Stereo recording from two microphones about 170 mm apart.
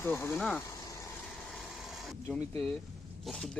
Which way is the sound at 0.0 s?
15° left (ahead or behind).